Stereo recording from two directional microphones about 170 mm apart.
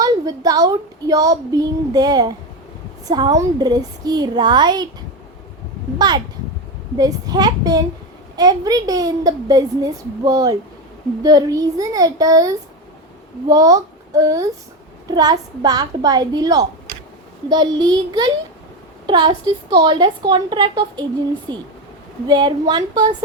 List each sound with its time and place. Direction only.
0.0 s a child's voice: 20° right (ahead or behind)
6.0 s a child's voice: 25° right (ahead or behind)